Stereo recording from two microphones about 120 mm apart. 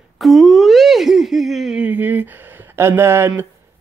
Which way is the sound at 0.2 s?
Centre (ahead or behind).